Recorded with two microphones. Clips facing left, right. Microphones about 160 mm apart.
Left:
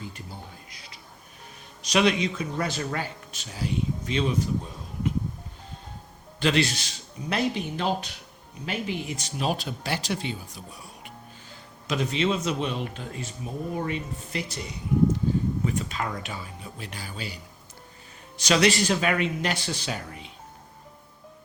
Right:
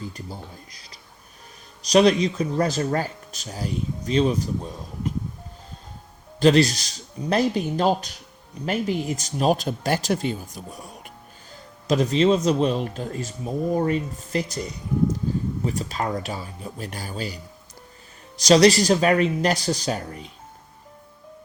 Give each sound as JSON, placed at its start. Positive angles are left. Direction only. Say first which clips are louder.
{"t": 0.1, "sound": "a man's voice", "louder": "right 4 dB", "side_deg": -40}
{"t": 6.4, "sound": "a man's voice", "louder": "right 7 dB", "side_deg": -40}